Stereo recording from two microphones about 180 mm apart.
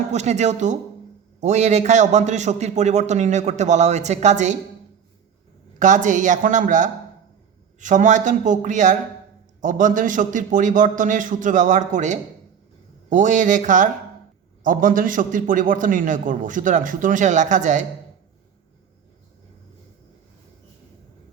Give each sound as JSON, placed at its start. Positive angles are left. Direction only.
{"t": 0.1, "sound": "a man's voice", "side_deg": -40}
{"t": 5.8, "sound": "a man's voice", "side_deg": -45}